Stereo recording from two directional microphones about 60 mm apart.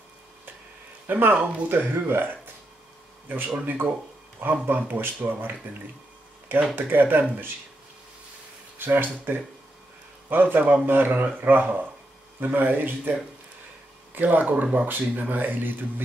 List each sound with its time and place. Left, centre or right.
1.0 s speech: right
6.7 s speech: right
8.7 s speech: right